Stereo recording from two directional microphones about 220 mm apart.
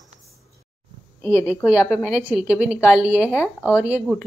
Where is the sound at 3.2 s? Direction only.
10° left (ahead or behind).